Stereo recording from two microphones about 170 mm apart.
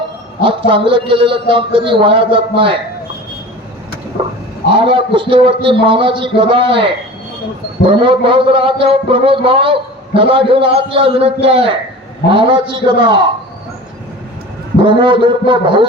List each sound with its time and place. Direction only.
0.4 s a man's voice: 30° right (ahead or behind)
4.7 s a man's voice: 30° right (ahead or behind)
14.8 s a man's voice: 30° right (ahead or behind)